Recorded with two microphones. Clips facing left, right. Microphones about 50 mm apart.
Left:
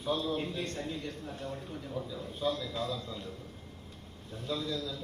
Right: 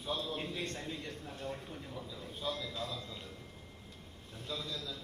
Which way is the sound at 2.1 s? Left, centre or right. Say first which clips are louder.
Left 6 dB; left.